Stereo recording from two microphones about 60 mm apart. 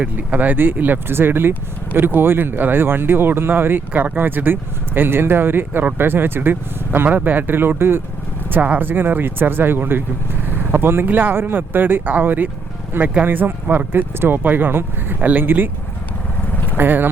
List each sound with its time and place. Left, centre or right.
0.0 s speech: right
8.4 s speech: right
16.7 s speech: right